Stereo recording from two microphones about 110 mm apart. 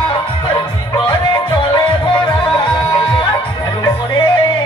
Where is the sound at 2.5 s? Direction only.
45° left (ahead or behind).